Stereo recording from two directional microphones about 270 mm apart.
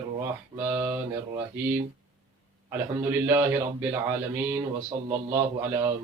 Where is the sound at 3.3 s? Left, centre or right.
Centre.